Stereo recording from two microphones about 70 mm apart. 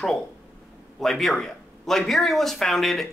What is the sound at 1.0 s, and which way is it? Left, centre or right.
Speech, centre.